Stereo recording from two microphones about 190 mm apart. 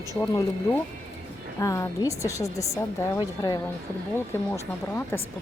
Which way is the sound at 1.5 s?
15° left (ahead or behind).